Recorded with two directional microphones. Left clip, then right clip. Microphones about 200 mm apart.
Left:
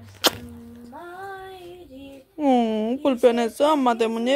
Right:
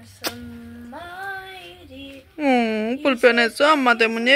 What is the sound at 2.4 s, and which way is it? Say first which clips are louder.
Speech: right 1 dB; 15° left (ahead or behind).